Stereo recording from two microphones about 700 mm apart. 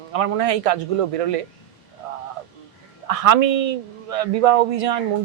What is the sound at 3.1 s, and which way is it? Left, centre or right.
Speech, right.